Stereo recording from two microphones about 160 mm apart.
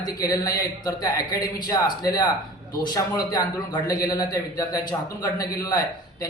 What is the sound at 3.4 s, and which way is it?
A man's voice, 25° left (ahead or behind).